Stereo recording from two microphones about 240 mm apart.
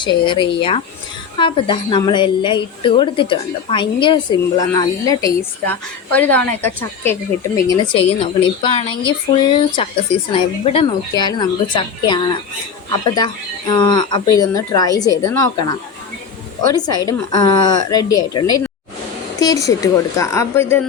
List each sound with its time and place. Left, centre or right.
0.0 s a woman's voice: centre
7.9 s a woman's voice: left
16.7 s a woman's voice: centre